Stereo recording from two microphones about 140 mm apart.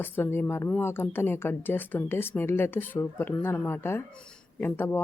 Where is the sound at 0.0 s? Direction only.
15° left (ahead or behind).